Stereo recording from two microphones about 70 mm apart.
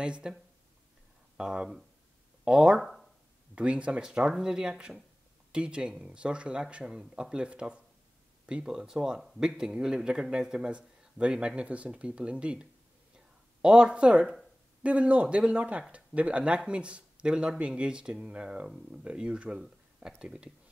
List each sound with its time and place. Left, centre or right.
0.0 s speech: centre
2.8 s a sound: centre
3.5 s speech: centre